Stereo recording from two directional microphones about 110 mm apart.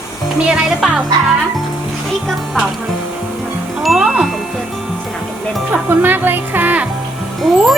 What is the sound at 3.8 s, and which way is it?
Music, 5° right (ahead or behind).